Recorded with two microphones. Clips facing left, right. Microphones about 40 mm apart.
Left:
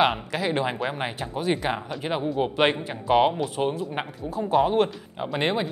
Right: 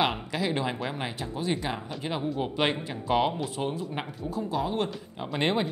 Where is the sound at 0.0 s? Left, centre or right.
Centre.